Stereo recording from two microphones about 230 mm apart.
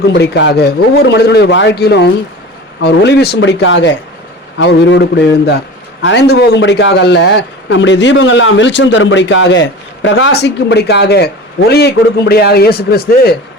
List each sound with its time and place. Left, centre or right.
0.1 s a man's voice: left